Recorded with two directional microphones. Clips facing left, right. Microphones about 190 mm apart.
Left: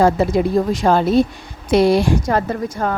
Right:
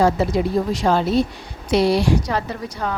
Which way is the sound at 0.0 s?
50° left (ahead or behind).